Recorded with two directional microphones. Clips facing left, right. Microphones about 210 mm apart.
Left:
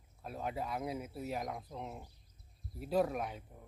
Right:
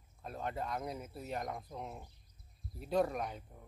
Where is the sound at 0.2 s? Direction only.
5° left (ahead or behind).